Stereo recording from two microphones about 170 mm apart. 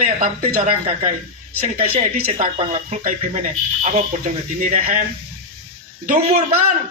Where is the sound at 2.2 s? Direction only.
45° right (ahead or behind).